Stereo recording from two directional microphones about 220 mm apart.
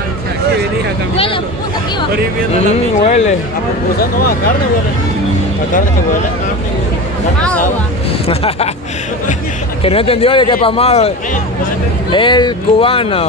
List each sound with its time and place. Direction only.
1.1 s speech: 25° left (ahead or behind)
2.5 s speech: 30° left (ahead or behind)
7.4 s speech: 5° left (ahead or behind)
8.3 s speech: 25° left (ahead or behind)
9.8 s speech: 25° left (ahead or behind)